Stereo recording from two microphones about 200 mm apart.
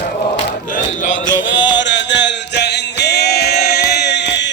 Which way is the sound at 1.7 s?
65° left (ahead or behind).